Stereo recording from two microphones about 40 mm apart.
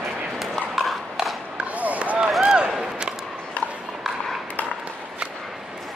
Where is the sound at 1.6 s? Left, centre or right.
Right.